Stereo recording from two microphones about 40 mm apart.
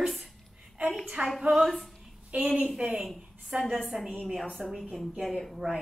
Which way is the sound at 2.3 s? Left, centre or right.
Right.